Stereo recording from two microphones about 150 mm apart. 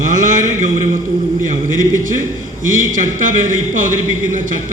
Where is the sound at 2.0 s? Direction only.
60° right (ahead or behind).